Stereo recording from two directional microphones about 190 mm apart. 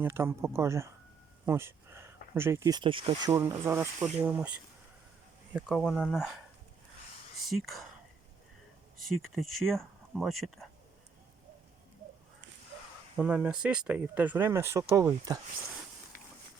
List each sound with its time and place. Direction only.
0.0 s speech: 15° right (ahead or behind)
5.5 s speech: 5° right (ahead or behind)
7.4 s speech: centre (ahead or behind)
9.3 s speech: centre (ahead or behind)
13.1 s speech: 5° right (ahead or behind)